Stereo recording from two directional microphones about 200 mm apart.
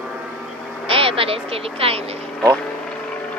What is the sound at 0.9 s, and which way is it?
Speech, 25° right (ahead or behind).